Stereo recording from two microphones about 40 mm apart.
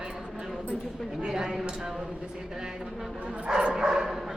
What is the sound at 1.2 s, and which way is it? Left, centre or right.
Speech, centre.